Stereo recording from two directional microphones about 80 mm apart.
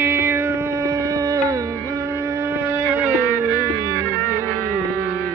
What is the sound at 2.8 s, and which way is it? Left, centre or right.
Music, centre.